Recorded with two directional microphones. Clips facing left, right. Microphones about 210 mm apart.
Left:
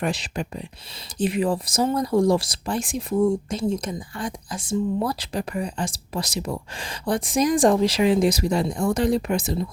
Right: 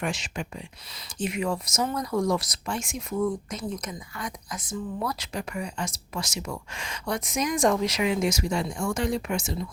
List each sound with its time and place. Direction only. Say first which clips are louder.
0.0 s speech: left 5 dB; 35° left (ahead or behind)